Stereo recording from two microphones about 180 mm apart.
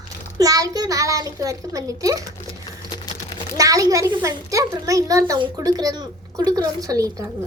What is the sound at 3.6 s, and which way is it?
A child's voice, 20° right (ahead or behind).